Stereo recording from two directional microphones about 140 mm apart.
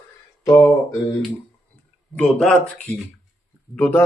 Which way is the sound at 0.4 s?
25° left (ahead or behind).